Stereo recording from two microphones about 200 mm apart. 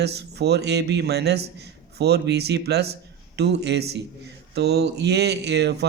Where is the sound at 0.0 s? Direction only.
55° right (ahead or behind).